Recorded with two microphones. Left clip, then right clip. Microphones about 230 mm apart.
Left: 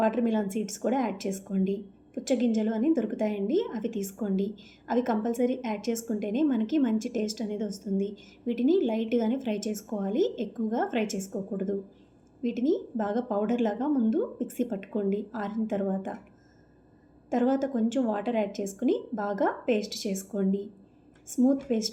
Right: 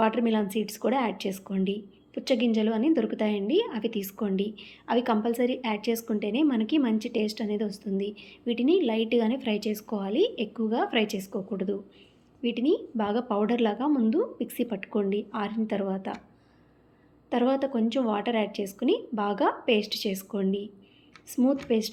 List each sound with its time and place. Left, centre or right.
0.0 s a woman's voice: centre
17.2 s a woman's voice: centre